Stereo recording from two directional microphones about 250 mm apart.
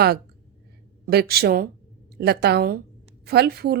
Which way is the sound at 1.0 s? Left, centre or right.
Right.